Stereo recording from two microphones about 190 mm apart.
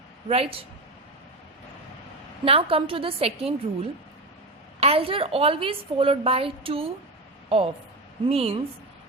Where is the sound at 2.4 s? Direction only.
30° right (ahead or behind).